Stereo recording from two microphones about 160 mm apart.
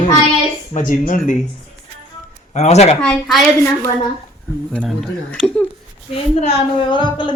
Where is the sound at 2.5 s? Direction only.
45° left (ahead or behind).